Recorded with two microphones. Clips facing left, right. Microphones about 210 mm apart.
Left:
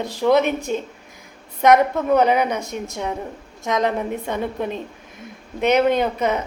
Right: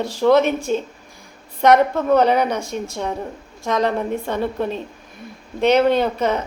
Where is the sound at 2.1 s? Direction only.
10° left (ahead or behind).